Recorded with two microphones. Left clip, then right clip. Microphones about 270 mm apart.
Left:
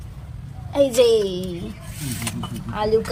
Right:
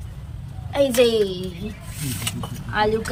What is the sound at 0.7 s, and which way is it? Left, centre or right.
Speech, left.